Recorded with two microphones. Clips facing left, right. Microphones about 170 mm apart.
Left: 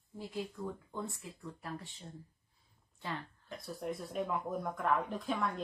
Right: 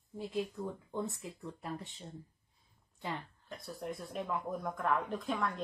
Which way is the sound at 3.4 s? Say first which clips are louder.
Left 2 dB; centre (ahead or behind).